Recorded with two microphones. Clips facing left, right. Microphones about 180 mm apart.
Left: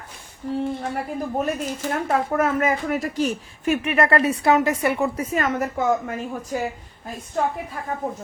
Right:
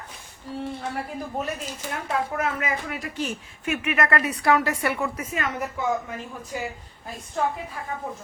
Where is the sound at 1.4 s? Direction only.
50° left (ahead or behind).